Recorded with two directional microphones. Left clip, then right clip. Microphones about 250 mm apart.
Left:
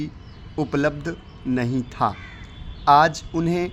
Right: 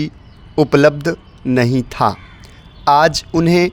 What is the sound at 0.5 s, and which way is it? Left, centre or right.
Speech, right.